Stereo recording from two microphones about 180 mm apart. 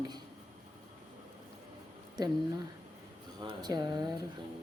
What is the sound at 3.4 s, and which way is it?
Speech, 25° right (ahead or behind).